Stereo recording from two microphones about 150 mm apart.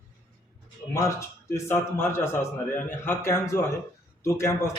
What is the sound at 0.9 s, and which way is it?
A man's voice, 20° left (ahead or behind).